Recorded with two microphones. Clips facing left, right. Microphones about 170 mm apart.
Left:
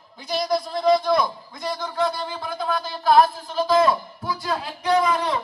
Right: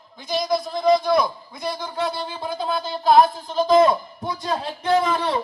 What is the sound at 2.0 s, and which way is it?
A man's voice, 20° right (ahead or behind).